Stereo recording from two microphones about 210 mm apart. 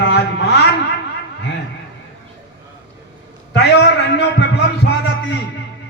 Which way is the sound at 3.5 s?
55° left (ahead or behind).